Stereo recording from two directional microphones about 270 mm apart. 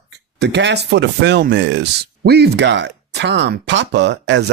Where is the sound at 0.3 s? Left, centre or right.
Right.